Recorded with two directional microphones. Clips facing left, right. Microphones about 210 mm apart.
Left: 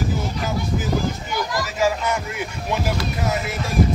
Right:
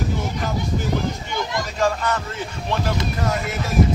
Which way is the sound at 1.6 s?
5° left (ahead or behind).